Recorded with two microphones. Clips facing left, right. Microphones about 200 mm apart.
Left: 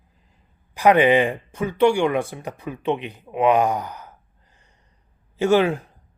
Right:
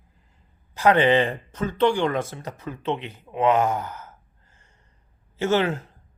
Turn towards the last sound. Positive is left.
turn(degrees=15)  # may be behind; listen again after turning